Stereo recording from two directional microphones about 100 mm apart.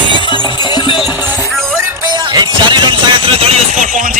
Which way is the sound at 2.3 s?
45° right (ahead or behind).